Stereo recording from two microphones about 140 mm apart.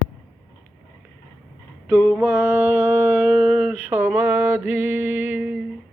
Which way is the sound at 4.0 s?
15° right (ahead or behind).